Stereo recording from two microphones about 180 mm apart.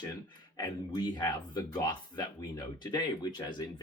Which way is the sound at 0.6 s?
20° left (ahead or behind).